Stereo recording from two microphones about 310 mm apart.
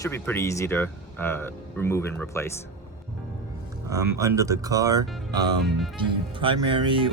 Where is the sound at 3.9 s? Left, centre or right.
Centre.